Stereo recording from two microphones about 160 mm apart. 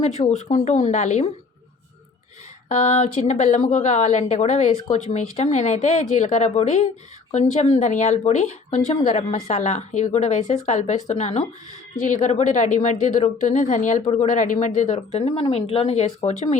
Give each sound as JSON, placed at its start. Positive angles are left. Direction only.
{"t": 0.2, "sound": "a woman's voice", "side_deg": 45}
{"t": 2.7, "sound": "a woman's voice", "side_deg": 45}
{"t": 14.3, "sound": "a woman's voice", "side_deg": 55}
{"t": 15.4, "sound": "speech", "side_deg": 35}